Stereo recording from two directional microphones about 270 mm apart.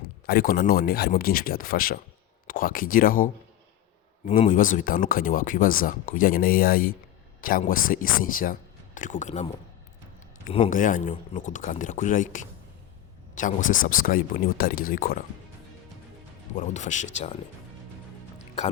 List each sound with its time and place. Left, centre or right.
0.3 s speech: left
4.3 s speech: left
16.6 s speech: left
18.3 s music: left